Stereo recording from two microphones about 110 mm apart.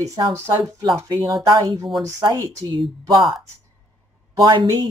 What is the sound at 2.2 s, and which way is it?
Speech, 35° right (ahead or behind).